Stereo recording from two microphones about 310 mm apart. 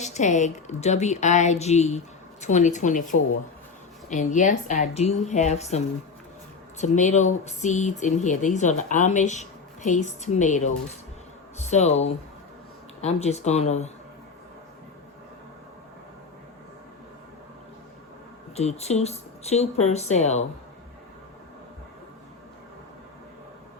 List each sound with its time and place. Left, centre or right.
0.0 s speech: left
18.5 s speech: left